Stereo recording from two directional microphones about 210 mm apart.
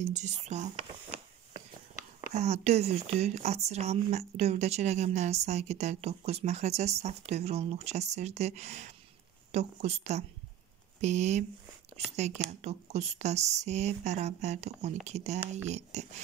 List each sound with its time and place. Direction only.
0.1 s speech: 35° right (ahead or behind)
2.3 s speech: 30° right (ahead or behind)